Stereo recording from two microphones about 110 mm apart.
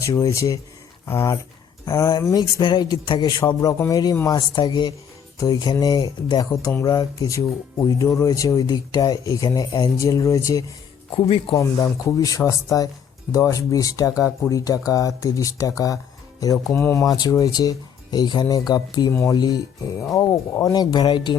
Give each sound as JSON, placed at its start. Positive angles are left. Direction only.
{"t": 0.0, "sound": "speech", "side_deg": 30}